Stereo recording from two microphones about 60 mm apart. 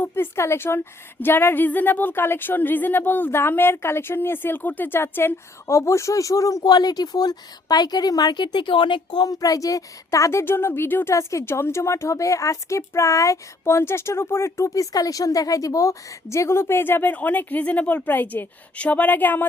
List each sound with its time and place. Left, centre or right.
0.0 s a woman's voice: left
5.6 s a woman's voice: left
10.4 s a woman's voice: left
11.1 s a woman's voice: left
14.7 s a woman's voice: left